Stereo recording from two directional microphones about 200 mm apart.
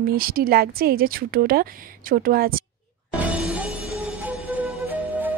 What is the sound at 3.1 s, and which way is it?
Music, 5° right (ahead or behind).